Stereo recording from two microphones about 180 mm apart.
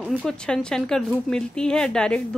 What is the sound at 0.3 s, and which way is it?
A woman's voice, 5° left (ahead or behind).